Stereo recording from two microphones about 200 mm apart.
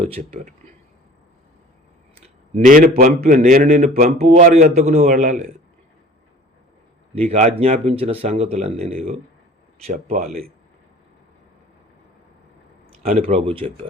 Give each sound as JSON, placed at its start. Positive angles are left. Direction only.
{"t": 0.0, "sound": "a man's voice", "side_deg": -30}
{"t": 2.2, "sound": "a man's voice", "side_deg": -40}
{"t": 7.2, "sound": "a man's voice", "side_deg": -35}
{"t": 13.1, "sound": "speech", "side_deg": -30}